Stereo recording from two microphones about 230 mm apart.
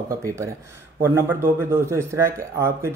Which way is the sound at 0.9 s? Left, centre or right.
Centre.